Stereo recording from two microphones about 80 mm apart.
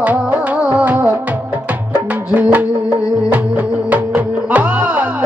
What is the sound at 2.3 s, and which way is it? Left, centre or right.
Music, right.